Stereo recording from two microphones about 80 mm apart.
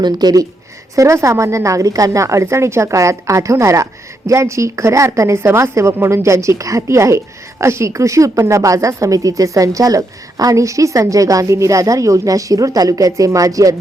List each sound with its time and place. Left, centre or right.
0.0 s speech: right
0.9 s a woman's voice: right